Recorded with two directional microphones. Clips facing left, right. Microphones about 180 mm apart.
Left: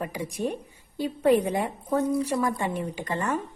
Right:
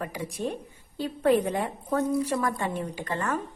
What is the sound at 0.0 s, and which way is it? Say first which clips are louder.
A woman's voice: left 2 dB; 15° left (ahead or behind).